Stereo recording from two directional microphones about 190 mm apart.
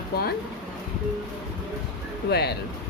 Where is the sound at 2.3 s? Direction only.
60° left (ahead or behind).